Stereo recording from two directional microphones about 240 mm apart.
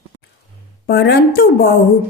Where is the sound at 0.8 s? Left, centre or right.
Left.